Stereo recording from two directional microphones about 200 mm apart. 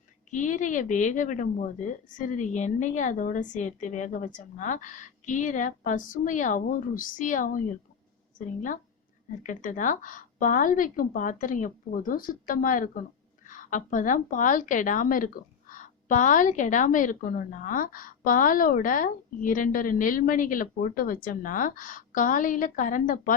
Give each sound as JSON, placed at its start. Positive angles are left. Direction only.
{"t": 0.3, "sound": "a woman's voice", "side_deg": 40}